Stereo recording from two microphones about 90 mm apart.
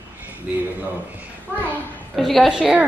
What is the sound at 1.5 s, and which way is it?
Children playing, 20° right (ahead or behind).